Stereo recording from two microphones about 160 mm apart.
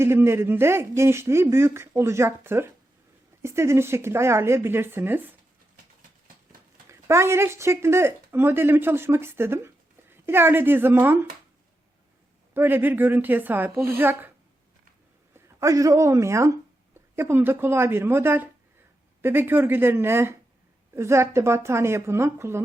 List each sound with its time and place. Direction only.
0.0 s a man's voice: 15° right (ahead or behind)
6.8 s speech: 15° right (ahead or behind)
12.5 s a man's voice: 15° right (ahead or behind)
15.3 s a man's voice: 20° right (ahead or behind)